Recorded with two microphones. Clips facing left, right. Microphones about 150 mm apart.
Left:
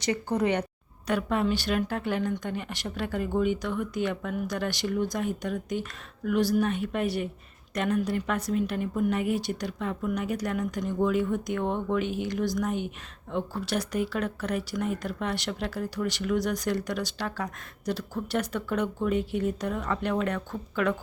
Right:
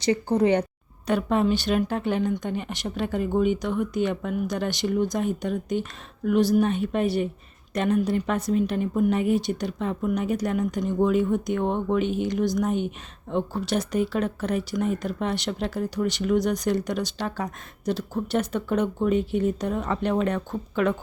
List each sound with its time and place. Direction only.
0.0 s speech: 30° right (ahead or behind)